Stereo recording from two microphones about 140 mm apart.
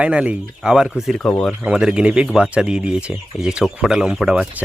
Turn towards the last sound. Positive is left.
turn(degrees=-5)  # may be behind; listen again after turning